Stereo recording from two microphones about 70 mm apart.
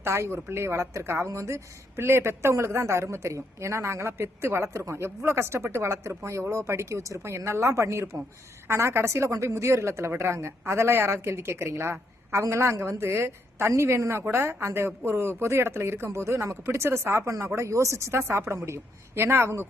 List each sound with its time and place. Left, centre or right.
0.0 s a woman's voice: right